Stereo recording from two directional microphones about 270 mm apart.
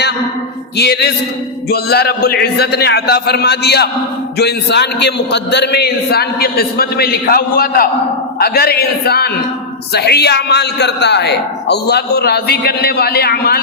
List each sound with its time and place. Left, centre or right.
0.8 s a man's voice: left